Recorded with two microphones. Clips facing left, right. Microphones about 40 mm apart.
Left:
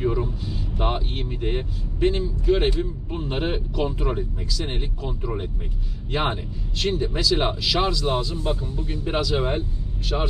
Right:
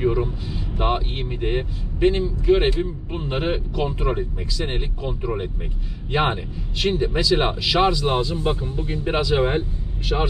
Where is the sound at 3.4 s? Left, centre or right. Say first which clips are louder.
Right 2 dB; centre.